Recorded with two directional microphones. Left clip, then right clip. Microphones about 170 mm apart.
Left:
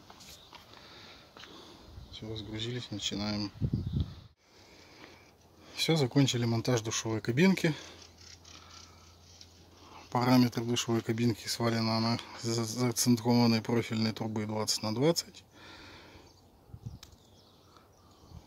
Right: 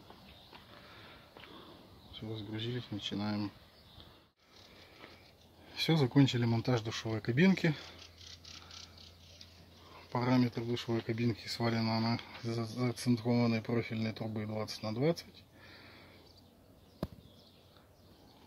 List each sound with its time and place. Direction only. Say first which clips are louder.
2.1 s speech: left 3 dB; 5° left (ahead or behind)
5.8 s speech: left 2 dB; 5° left (ahead or behind)
10.1 s speech: left 5 dB; 30° left (ahead or behind)